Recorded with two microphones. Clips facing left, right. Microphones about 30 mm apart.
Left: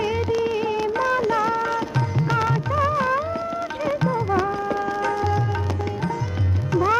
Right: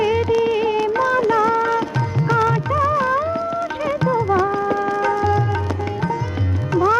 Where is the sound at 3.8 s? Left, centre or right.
Centre.